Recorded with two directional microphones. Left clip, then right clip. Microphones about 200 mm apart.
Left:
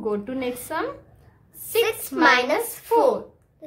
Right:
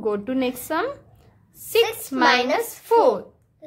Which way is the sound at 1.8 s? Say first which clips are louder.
Right 1 dB; 10° left (ahead or behind).